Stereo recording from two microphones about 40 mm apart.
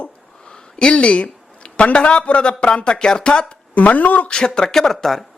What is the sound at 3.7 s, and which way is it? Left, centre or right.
Speech, left.